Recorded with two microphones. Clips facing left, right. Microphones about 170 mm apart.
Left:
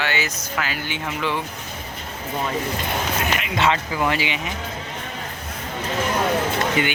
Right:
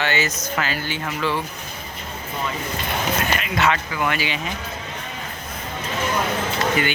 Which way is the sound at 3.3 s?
20° left (ahead or behind).